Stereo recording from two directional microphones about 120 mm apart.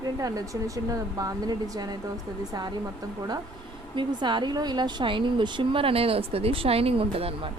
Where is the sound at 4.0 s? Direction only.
40° right (ahead or behind).